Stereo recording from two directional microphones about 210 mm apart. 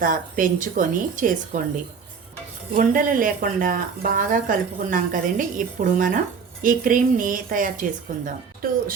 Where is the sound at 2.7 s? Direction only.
40° right (ahead or behind).